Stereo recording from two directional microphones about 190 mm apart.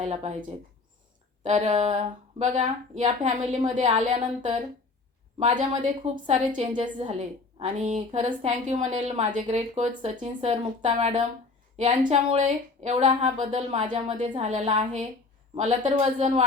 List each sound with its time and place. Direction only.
0.0 s a woman's voice: 35° right (ahead or behind)
1.5 s a woman's voice: 35° right (ahead or behind)